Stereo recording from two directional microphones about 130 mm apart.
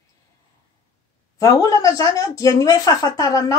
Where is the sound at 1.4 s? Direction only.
25° left (ahead or behind).